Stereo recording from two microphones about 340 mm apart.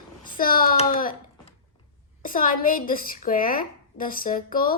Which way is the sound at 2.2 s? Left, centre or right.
Left.